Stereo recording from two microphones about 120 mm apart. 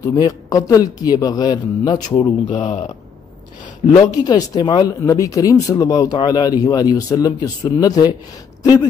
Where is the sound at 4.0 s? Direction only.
35° left (ahead or behind).